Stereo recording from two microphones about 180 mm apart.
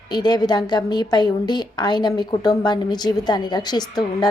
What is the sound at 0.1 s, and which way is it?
A woman's voice, 25° left (ahead or behind).